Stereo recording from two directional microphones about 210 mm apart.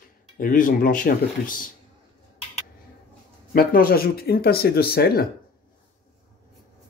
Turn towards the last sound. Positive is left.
turn(degrees=45)  # may be behind; listen again after turning